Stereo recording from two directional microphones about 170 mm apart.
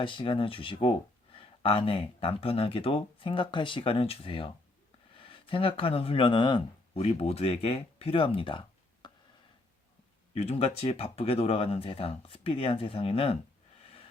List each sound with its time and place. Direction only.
0.0 s speech: 30° left (ahead or behind)
10.3 s speech: 35° left (ahead or behind)